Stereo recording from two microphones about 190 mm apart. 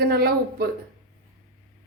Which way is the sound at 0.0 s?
55° right (ahead or behind).